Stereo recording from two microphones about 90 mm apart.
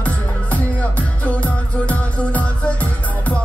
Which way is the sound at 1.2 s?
15° left (ahead or behind).